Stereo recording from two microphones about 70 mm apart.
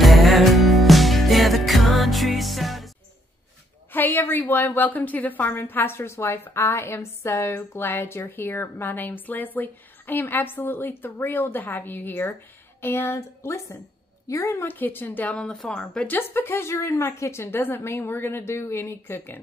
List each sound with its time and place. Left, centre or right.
0.0 s music: centre
3.9 s a woman's voice: left
14.7 s a woman's voice: left
15.3 s speech: centre
16.1 s speech: left